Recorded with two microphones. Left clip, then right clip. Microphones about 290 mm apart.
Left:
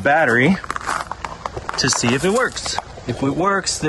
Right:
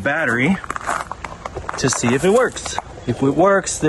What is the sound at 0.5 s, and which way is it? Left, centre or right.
Speech, centre.